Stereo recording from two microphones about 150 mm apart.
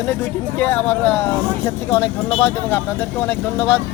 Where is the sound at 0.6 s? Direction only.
10° left (ahead or behind).